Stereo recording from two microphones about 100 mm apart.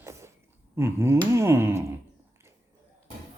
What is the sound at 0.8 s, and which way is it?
Speech, 25° right (ahead or behind).